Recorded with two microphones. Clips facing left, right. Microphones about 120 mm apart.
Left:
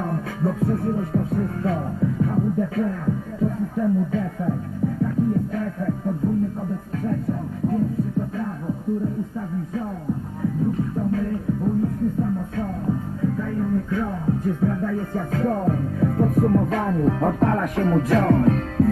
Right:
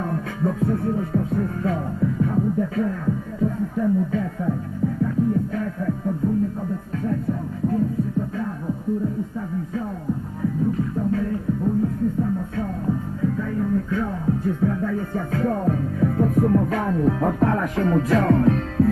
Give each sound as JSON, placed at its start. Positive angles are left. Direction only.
{"t": 0.0, "sound": "music", "side_deg": 35}
{"t": 11.0, "sound": "music", "side_deg": 35}
{"t": 13.4, "sound": "music", "side_deg": 35}
{"t": 16.6, "sound": "music", "side_deg": 25}
{"t": 16.9, "sound": "music", "side_deg": 40}